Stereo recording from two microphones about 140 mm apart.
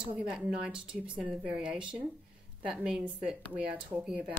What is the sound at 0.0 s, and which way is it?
A woman's voice, 5° right (ahead or behind).